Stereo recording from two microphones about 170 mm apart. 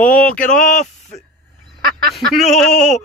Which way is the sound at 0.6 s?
45° left (ahead or behind).